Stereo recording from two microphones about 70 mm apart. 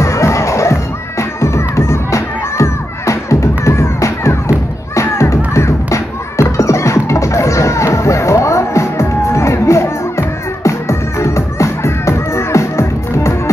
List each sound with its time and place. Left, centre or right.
0.0 s music: left